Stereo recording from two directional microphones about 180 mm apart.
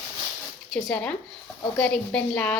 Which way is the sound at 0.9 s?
5° left (ahead or behind).